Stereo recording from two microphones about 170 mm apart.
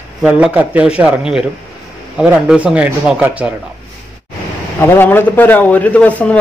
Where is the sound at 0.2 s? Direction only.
5° right (ahead or behind).